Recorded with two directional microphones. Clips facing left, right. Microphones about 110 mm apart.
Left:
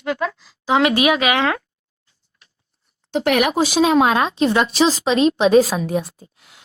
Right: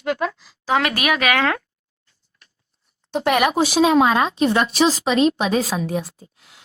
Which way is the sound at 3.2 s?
65° left (ahead or behind).